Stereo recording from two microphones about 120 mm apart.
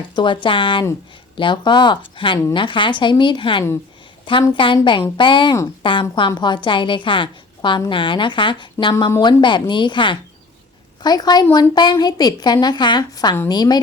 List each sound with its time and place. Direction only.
0.4 s a woman's voice: 45° left (ahead or behind)